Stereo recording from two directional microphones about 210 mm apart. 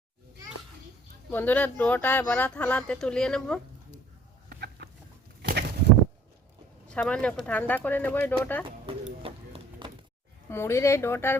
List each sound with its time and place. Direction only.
1.3 s speech: 10° left (ahead or behind)
4.4 s chicken: 50° right (ahead or behind)
5.4 s a sound: 50° right (ahead or behind)
6.8 s speech: 5° left (ahead or behind)
9.2 s run: 25° right (ahead or behind)
10.5 s speech: 10° left (ahead or behind)